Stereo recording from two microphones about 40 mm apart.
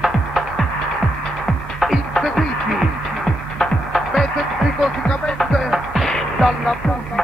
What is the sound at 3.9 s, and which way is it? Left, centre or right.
Music, centre.